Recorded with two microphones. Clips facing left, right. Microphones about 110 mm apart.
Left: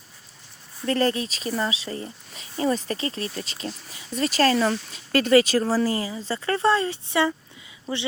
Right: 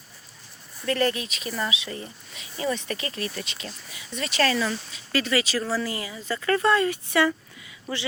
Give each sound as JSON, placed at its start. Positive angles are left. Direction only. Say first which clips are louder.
{"t": 0.9, "sound": "speech", "louder": "left 2 dB", "side_deg": 35}